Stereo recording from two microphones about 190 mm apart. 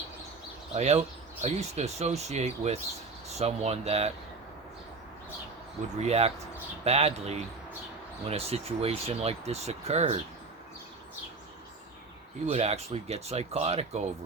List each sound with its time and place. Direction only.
0.7 s speech: 35° right (ahead or behind)
6.0 s speech: 35° right (ahead or behind)
12.5 s speech: 35° right (ahead or behind)